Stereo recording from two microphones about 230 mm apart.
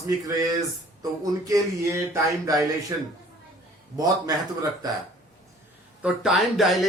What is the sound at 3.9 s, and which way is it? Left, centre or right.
Speech, centre.